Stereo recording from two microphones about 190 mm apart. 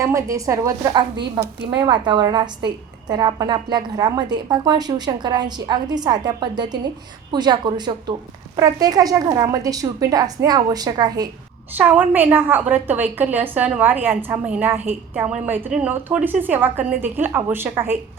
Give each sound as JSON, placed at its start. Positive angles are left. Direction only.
{"t": 0.0, "sound": "a woman's voice", "side_deg": -15}
{"t": 11.8, "sound": "a woman's voice", "side_deg": -10}